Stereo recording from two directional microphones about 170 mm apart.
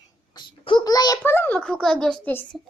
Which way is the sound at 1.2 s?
10° left (ahead or behind).